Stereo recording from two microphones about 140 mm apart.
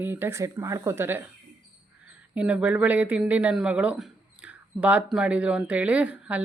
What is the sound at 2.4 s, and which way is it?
Speech, 10° right (ahead or behind).